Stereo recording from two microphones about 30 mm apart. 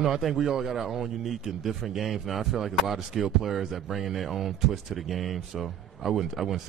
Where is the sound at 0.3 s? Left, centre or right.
Centre.